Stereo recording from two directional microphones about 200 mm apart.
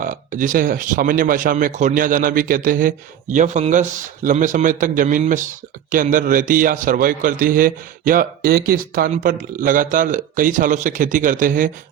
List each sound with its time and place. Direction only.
0.0 s a man's voice: 40° right (ahead or behind)